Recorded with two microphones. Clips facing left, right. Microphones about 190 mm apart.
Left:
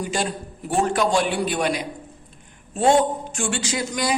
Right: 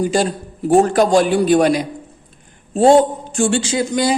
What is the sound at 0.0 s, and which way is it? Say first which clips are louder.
Speech: right 8 dB; 35° right (ahead or behind).